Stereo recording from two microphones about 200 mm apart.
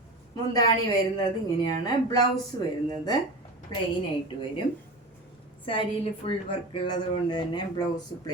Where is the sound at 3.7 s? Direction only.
20° left (ahead or behind).